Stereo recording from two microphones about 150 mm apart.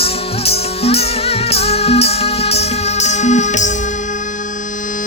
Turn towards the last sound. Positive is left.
turn(degrees=55)  # may be behind; listen again after turning